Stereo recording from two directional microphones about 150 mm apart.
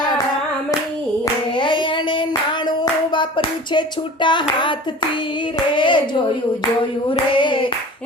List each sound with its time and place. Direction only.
1.2 s hands: 30° left (ahead or behind)
2.6 s a sound: 30° left (ahead or behind)
5.7 s hands: 30° left (ahead or behind)
7.1 s hands: 35° left (ahead or behind)